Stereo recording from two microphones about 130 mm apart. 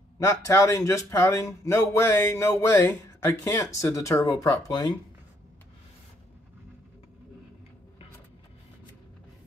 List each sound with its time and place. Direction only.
0.2 s speech: 25° left (ahead or behind)